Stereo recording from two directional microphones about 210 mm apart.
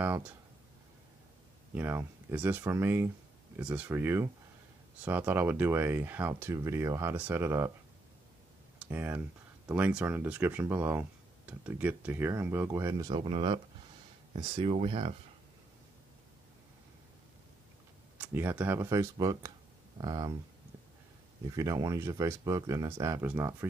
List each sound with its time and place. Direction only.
0.0 s speech: 10° right (ahead or behind)
1.8 s speech: 10° right (ahead or behind)
8.7 s speech: 10° right (ahead or behind); by 15.1 s 25° right (ahead or behind)
18.1 s speech: 10° right (ahead or behind)
21.5 s speech: 15° right (ahead or behind)